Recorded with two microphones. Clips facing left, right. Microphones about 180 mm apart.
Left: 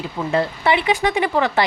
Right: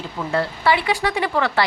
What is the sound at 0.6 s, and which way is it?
Speech, 20° left (ahead or behind).